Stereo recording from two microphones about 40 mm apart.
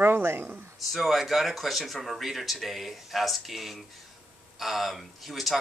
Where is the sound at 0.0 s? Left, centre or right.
Right.